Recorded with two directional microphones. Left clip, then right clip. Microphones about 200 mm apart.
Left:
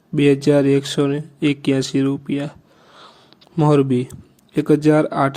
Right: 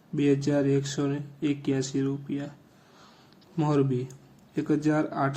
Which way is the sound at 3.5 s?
35° left (ahead or behind).